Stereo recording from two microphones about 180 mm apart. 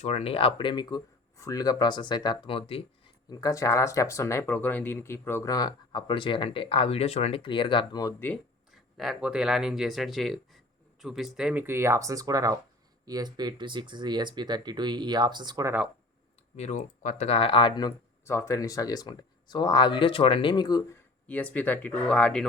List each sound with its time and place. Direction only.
0.0 s speech: 35° left (ahead or behind)
3.2 s speech: 20° left (ahead or behind)
8.3 s speech: centre (ahead or behind); by 15.7 s 20° right (ahead or behind)
16.6 s speech: 40° left (ahead or behind); by 20.8 s 25° left (ahead or behind)
21.2 s speech: 10° left (ahead or behind)